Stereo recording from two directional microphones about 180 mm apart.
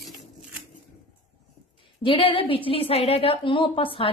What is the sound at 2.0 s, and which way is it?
A woman's voice, 30° left (ahead or behind).